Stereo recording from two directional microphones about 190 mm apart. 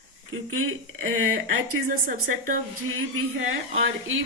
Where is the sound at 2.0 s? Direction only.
50° right (ahead or behind).